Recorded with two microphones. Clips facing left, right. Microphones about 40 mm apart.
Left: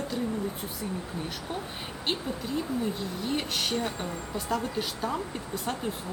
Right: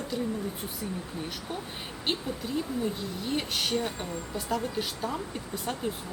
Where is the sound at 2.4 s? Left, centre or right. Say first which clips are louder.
Even; centre.